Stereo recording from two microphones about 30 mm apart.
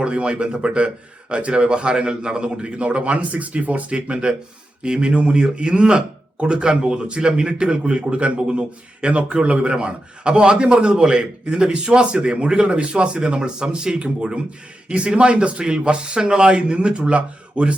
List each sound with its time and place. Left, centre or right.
0.0 s a man's voice: right
3.8 s speech: right
9.7 s speech: right